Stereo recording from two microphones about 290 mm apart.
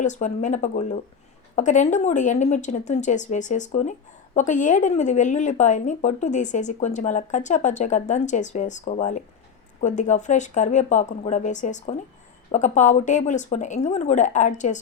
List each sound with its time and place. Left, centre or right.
0.0 s speech: left